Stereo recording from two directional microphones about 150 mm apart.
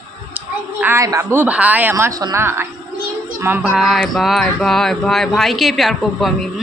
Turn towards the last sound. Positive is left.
turn(degrees=0)  # may be behind; listen again after turning